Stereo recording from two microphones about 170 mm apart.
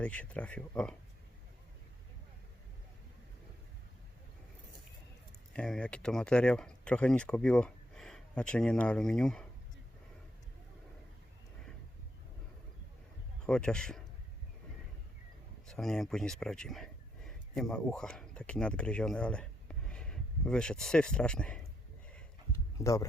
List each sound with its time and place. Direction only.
0.0 s speech: 10° left (ahead or behind)
5.5 s speech: 5° left (ahead or behind)
13.4 s a man's voice: 5° left (ahead or behind)
15.6 s speech: 5° left (ahead or behind)
22.8 s speech: 20° left (ahead or behind)